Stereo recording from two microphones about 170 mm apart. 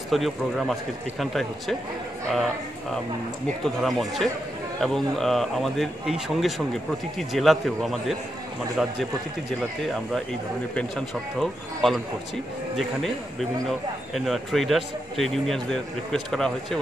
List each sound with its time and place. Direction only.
0.1 s speech: centre (ahead or behind)
10.7 s speech: 5° left (ahead or behind)